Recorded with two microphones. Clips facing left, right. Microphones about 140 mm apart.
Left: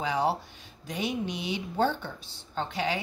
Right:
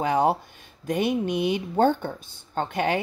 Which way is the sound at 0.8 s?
50° right (ahead or behind).